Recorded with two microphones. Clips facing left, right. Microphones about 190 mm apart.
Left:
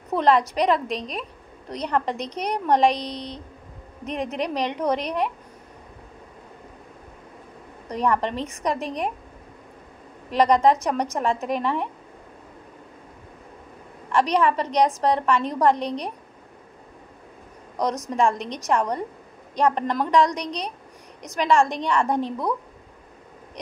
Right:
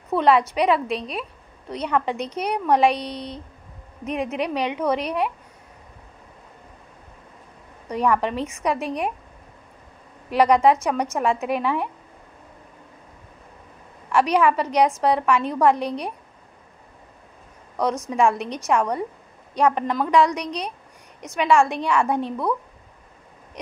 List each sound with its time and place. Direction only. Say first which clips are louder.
0.1 s a woman's voice: right 1 dB; 5° right (ahead or behind)
7.9 s a woman's voice: right 2 dB; 5° right (ahead or behind)
10.3 s a woman's voice: right 1 dB; 5° right (ahead or behind)
14.1 s a woman's voice: right 2 dB; 5° right (ahead or behind)
18.3 s a woman's voice: right 2 dB; 5° right (ahead or behind)
20.1 s a woman's voice: right 2 dB; 35° left (ahead or behind)
21.4 s a woman's voice: right 1 dB; 5° right (ahead or behind)